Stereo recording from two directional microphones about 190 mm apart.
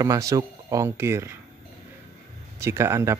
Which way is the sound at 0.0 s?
15° right (ahead or behind).